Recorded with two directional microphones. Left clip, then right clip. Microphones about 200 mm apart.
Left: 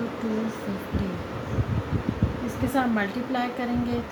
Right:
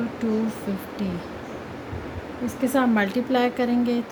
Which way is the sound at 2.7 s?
45° right (ahead or behind).